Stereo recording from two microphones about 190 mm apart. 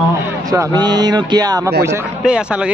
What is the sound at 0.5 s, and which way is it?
Speech, 20° right (ahead or behind).